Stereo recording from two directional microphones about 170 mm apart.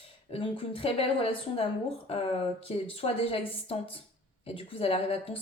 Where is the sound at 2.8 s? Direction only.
35° left (ahead or behind).